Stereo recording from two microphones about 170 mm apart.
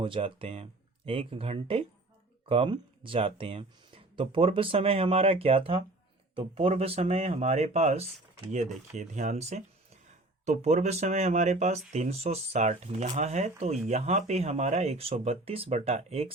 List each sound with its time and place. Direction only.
0.0 s speech: 30° right (ahead or behind)